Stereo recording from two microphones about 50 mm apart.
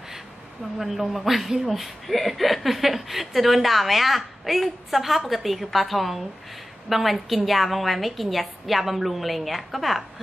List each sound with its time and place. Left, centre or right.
0.7 s speech: centre